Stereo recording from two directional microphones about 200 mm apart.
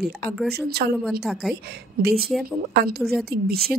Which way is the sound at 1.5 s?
50° right (ahead or behind).